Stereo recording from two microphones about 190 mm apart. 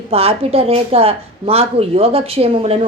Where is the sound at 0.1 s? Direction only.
30° right (ahead or behind).